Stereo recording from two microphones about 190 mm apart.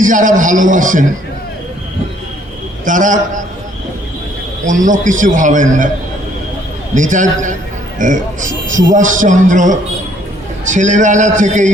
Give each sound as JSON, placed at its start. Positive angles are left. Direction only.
{"t": 0.0, "sound": "a man's voice", "side_deg": -45}
{"t": 2.8, "sound": "a man's voice", "side_deg": -45}
{"t": 4.6, "sound": "a man's voice", "side_deg": -40}
{"t": 6.9, "sound": "a man's voice", "side_deg": -40}